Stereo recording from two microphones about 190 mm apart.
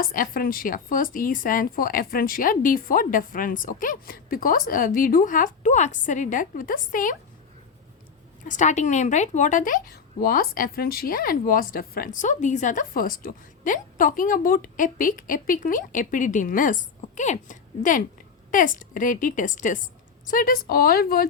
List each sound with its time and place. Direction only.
0.0 s a woman's voice: 50° left (ahead or behind)
8.4 s a woman's voice: 40° left (ahead or behind)